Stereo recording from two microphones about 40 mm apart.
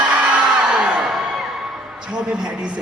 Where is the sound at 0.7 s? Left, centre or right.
Right.